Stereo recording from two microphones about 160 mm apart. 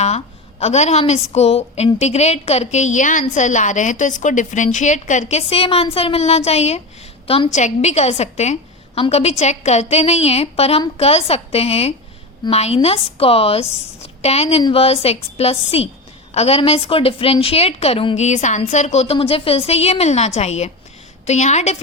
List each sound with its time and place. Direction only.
0.6 s a woman's voice: 45° left (ahead or behind)
18.2 s a woman's voice: 45° left (ahead or behind)